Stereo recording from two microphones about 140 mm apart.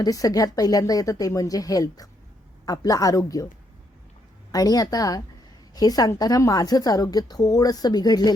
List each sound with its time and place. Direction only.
0.0 s a woman's voice: 25° left (ahead or behind)
4.5 s a woman's voice: 25° left (ahead or behind)